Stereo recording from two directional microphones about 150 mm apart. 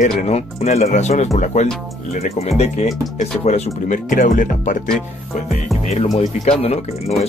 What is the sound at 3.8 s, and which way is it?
Speech, 60° left (ahead or behind).